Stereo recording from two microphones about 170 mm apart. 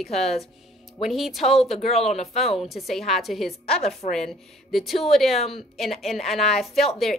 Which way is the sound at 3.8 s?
40° left (ahead or behind).